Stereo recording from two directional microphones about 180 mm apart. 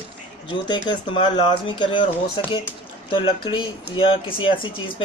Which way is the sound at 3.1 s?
30° left (ahead or behind).